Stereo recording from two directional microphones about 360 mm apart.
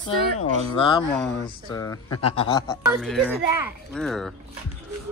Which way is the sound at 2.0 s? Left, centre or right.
Left.